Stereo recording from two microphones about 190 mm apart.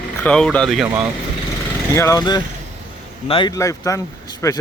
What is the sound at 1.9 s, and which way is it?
A man's voice, 15° left (ahead or behind).